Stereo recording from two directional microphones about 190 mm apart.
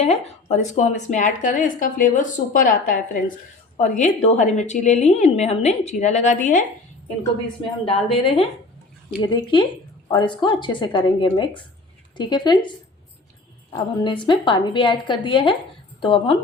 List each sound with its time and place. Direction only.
0.5 s a woman's voice: 35° left (ahead or behind)
7.9 s a woman's voice: 30° left (ahead or behind)
13.7 s a woman's voice: 25° left (ahead or behind)